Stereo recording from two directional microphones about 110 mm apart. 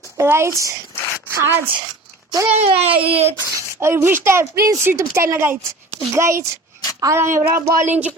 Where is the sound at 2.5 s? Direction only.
70° right (ahead or behind).